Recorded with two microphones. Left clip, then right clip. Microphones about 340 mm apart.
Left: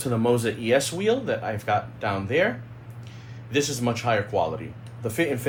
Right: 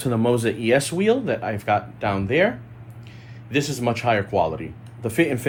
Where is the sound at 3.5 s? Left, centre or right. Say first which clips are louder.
Right 2 dB; right.